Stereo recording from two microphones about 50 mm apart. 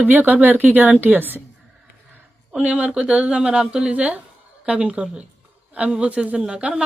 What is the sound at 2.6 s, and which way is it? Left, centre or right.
Speech, right.